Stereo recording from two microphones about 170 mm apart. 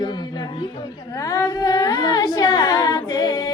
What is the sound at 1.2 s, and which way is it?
Humming, 20° left (ahead or behind).